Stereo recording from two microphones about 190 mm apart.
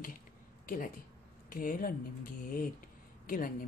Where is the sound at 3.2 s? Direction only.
45° left (ahead or behind).